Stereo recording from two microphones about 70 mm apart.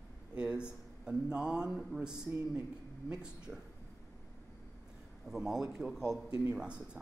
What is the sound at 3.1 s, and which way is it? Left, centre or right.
Speech, centre.